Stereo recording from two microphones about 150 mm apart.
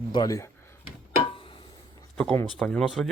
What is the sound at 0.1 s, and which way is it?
Speech, 25° left (ahead or behind).